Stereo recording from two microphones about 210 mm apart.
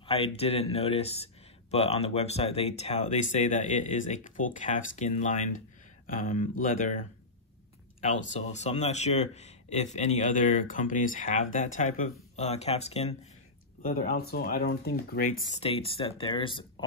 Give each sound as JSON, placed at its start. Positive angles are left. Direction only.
{"t": 0.0, "sound": "a man's voice", "side_deg": 30}
{"t": 8.0, "sound": "a man's voice", "side_deg": 35}
{"t": 13.8, "sound": "speech", "side_deg": 45}
{"t": 15.5, "sound": "speech", "side_deg": 30}